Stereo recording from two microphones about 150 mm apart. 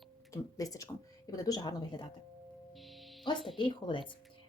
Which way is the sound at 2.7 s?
Centre (ahead or behind).